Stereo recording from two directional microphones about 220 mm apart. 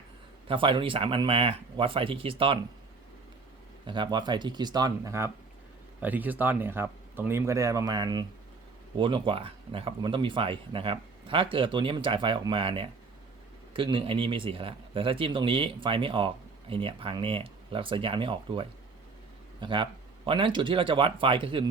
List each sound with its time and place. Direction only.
0.4 s a man's voice: 25° right (ahead or behind)
3.8 s a man's voice: 20° right (ahead or behind)